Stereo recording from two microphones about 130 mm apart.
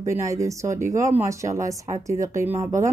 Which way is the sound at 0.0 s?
25° right (ahead or behind).